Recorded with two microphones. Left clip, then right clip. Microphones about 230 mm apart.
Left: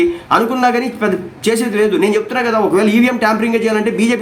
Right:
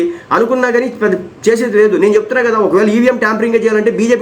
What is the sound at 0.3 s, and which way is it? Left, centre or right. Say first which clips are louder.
Speech: right 3 dB; centre.